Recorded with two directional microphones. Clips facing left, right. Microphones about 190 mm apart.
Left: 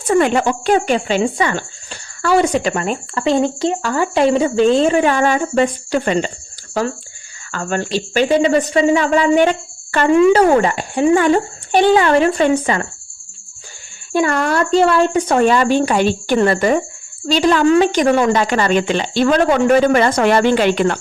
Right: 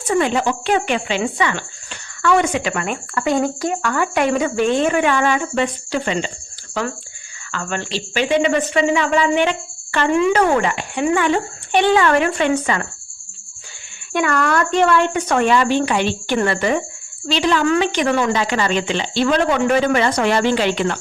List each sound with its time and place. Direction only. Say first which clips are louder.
0.1 s a woman's voice: left 4 dB; 55° left (ahead or behind)
7.5 s a woman's voice: left 5 dB; 40° left (ahead or behind)
14.1 s a woman's voice: left 2 dB; 30° left (ahead or behind); by 21.0 s 50° left (ahead or behind)